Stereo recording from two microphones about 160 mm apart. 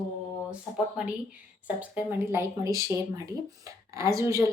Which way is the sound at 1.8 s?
15° right (ahead or behind).